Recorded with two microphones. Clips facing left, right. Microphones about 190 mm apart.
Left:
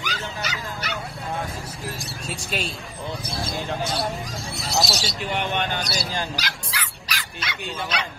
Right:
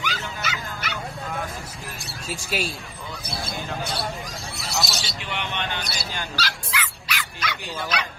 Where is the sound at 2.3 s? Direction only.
5° right (ahead or behind).